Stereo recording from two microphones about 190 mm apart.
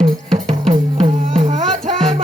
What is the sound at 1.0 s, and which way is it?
Music, 40° right (ahead or behind).